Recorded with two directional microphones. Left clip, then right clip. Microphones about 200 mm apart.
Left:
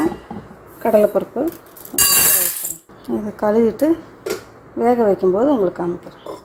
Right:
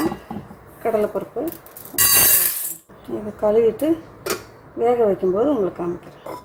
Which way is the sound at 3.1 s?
35° left (ahead or behind).